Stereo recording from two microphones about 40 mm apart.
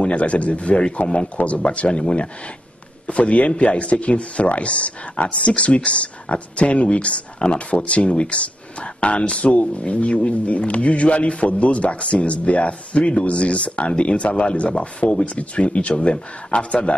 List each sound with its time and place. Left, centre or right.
0.0 s speech: left
1.3 s speech: left